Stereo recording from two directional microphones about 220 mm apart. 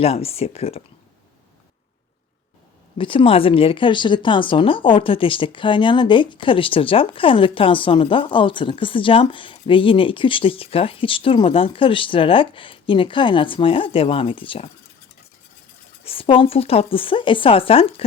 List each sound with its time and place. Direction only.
0.0 s speech: 25° left (ahead or behind)
3.0 s speech: 25° left (ahead or behind)
16.0 s speech: 25° left (ahead or behind)